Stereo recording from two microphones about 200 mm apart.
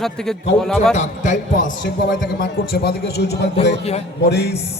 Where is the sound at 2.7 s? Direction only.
55° left (ahead or behind).